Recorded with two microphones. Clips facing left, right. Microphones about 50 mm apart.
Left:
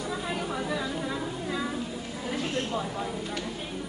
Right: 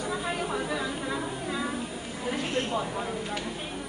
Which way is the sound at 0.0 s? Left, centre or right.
Centre.